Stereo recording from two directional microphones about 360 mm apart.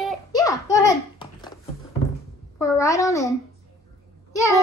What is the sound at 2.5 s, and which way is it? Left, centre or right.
A woman's voice, centre.